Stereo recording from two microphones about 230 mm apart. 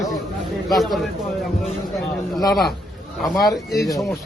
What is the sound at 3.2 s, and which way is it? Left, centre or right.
Speech, centre.